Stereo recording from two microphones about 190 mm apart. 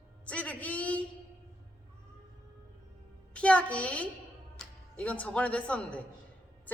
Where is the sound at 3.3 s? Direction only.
5° left (ahead or behind).